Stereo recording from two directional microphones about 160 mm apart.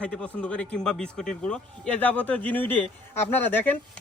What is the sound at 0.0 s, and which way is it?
A man's voice, 5° left (ahead or behind).